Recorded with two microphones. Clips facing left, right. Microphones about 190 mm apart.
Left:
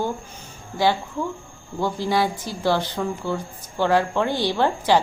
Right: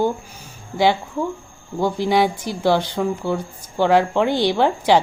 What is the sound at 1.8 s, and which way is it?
A woman's voice, 15° right (ahead or behind).